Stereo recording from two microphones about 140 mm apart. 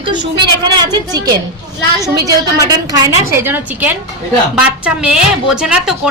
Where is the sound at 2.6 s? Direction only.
25° right (ahead or behind).